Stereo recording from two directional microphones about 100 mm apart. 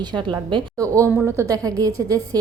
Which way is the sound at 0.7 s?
30° right (ahead or behind).